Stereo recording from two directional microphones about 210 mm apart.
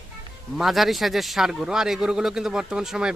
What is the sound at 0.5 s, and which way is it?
A man's voice, centre (ahead or behind).